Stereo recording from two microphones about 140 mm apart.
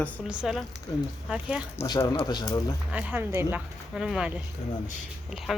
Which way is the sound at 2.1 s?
30° left (ahead or behind).